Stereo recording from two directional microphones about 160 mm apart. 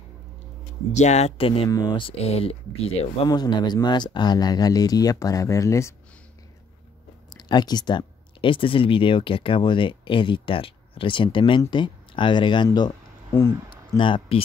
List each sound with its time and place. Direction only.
0.9 s speech: 45° left (ahead or behind)
1.7 s speech: 25° left (ahead or behind)
7.2 s speech: 25° left (ahead or behind)
13.9 s speech: 30° left (ahead or behind)